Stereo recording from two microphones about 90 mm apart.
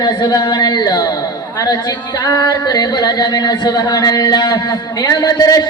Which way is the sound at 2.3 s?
40° left (ahead or behind).